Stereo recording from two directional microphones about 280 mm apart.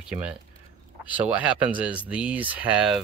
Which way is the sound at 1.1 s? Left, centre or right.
Centre.